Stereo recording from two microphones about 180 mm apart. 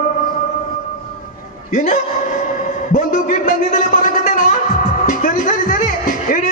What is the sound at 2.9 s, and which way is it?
Music, 45° left (ahead or behind).